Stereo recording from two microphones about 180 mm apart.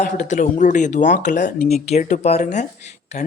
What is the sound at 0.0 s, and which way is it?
Speech, 45° left (ahead or behind).